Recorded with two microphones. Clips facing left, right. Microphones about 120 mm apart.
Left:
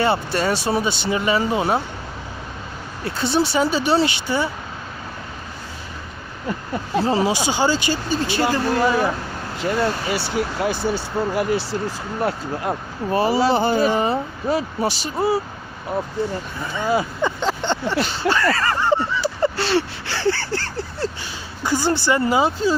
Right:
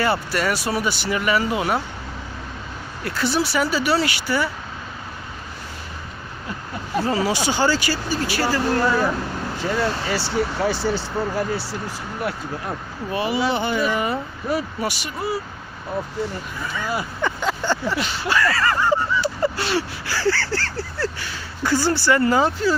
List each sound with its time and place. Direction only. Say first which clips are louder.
0.0 s speech: left 2 dB; 25° left (ahead or behind)
3.0 s speech: left 2 dB; 25° left (ahead or behind)
6.9 s speech: left 2 dB; 25° left (ahead or behind)
10.9 s speech: left 2 dB; 70° left (ahead or behind)
13.1 s speech: left 4 dB; 35° left (ahead or behind)
16.7 s speech: left 7 dB; 20° left (ahead or behind)
18.5 s a sound: even; 35° left (ahead or behind); by 22.7 s 15° left (ahead or behind)